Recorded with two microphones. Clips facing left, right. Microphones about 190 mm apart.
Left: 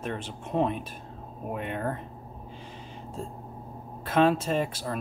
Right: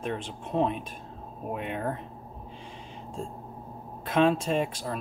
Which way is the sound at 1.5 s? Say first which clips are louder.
Even; 55° left (ahead or behind).